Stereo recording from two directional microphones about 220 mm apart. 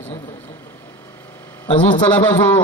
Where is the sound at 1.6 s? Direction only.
20° left (ahead or behind).